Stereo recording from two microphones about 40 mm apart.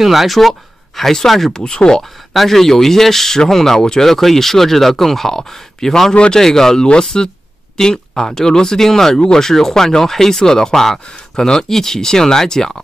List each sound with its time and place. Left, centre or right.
0.0 s speech: centre
1.6 s speech: centre
2.3 s speech: centre
6.1 s speech: left
6.4 s speech: centre